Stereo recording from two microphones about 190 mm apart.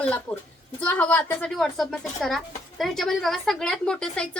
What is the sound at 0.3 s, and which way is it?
A woman's voice, 5° left (ahead or behind).